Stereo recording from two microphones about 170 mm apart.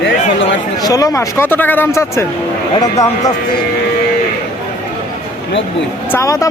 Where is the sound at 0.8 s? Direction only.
20° left (ahead or behind).